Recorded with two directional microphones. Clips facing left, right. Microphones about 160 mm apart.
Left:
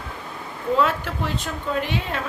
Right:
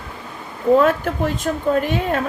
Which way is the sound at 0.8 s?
50° right (ahead or behind).